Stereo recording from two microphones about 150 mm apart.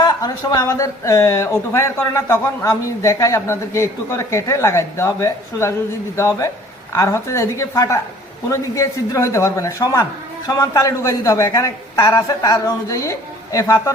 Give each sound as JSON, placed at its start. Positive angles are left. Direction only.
{"t": 0.0, "sound": "speech", "side_deg": 25}